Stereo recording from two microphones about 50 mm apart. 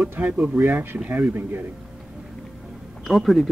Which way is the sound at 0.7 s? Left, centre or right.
Right.